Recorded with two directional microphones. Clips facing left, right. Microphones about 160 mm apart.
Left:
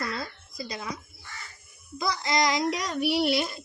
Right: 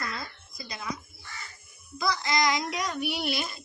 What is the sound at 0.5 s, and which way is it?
Speech, 35° left (ahead or behind).